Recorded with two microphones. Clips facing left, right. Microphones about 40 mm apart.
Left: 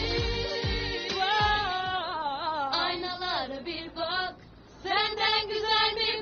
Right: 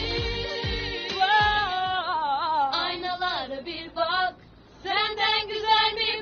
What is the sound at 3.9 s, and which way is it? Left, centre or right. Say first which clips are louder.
Female singing: right 7 dB; right.